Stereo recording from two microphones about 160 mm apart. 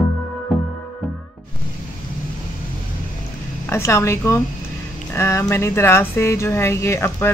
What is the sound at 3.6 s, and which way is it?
A woman's voice, 15° left (ahead or behind).